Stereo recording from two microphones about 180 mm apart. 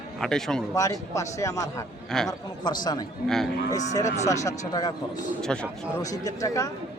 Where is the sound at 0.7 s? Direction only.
20° left (ahead or behind).